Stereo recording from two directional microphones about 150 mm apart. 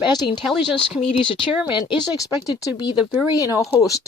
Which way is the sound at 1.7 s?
30° left (ahead or behind).